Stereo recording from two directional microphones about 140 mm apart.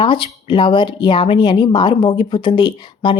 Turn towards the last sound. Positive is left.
turn(degrees=35)  # may be behind; listen again after turning